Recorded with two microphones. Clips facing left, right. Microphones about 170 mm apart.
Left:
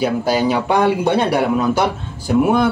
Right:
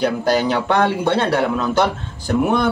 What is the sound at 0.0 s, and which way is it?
Speech, 10° left (ahead or behind).